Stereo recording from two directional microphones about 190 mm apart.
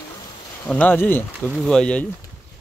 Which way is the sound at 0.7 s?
10° left (ahead or behind).